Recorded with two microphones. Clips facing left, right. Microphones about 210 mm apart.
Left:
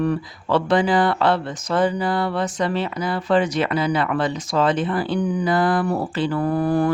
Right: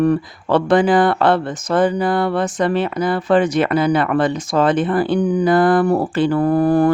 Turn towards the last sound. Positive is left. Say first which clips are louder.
# right 5 dB
turn(degrees=-50)  # may be behind; listen again after turning